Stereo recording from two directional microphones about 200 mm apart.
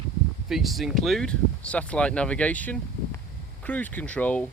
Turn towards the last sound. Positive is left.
turn(degrees=5)  # may be behind; listen again after turning